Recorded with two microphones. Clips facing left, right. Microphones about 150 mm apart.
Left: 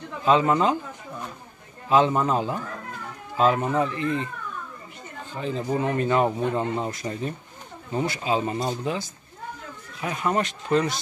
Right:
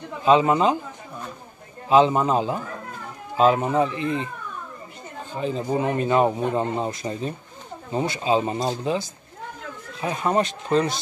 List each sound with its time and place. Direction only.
0.2 s speech: 20° right (ahead or behind)
1.9 s speech: 20° right (ahead or behind)
5.3 s speech: 15° right (ahead or behind)